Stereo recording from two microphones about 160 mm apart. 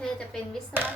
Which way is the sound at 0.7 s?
10° right (ahead or behind).